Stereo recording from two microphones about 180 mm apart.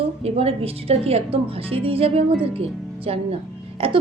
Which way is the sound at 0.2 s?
35° right (ahead or behind).